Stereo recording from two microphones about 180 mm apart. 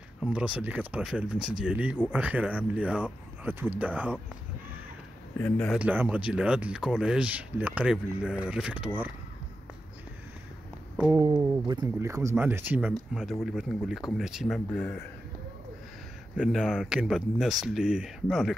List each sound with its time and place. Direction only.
0.2 s speech: 5° right (ahead or behind)
5.4 s speech: 5° left (ahead or behind)
5.8 s speech: 10° right (ahead or behind)
11.1 s speech: 20° right (ahead or behind); by 15.0 s 10° left (ahead or behind)
16.3 s speech: centre (ahead or behind)